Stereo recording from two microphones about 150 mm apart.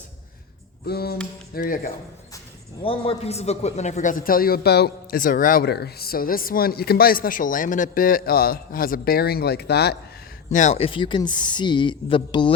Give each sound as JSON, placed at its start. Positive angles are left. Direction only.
{"t": 0.9, "sound": "a sound", "side_deg": 90}
{"t": 1.5, "sound": "a man's voice", "side_deg": 70}
{"t": 2.8, "sound": "a man's voice", "side_deg": 40}
{"t": 10.5, "sound": "speech", "side_deg": 50}